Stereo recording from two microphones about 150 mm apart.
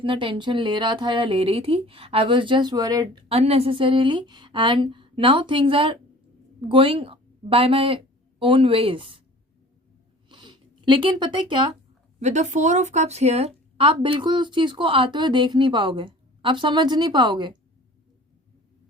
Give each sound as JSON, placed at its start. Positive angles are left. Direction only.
{"t": 0.0, "sound": "speech", "side_deg": -35}
{"t": 3.2, "sound": "a woman's voice", "side_deg": -40}
{"t": 10.2, "sound": "a sound", "side_deg": -30}
{"t": 12.2, "sound": "speech", "side_deg": -50}